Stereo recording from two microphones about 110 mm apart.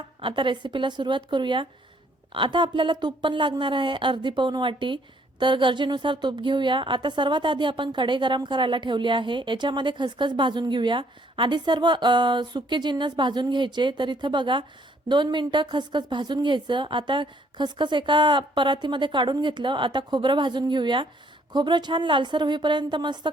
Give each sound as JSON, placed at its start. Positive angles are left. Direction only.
{"t": 0.2, "sound": "a woman's voice", "side_deg": -50}